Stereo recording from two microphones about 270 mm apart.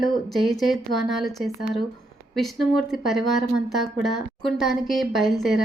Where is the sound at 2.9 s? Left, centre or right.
Centre.